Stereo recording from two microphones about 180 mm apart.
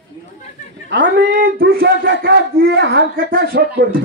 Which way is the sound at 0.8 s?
80° right.